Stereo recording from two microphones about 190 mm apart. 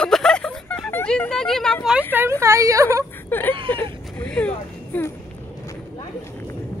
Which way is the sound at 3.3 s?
10° left (ahead or behind).